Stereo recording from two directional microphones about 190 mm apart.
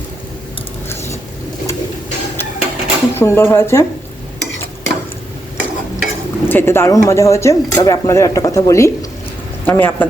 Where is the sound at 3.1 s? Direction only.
15° left (ahead or behind).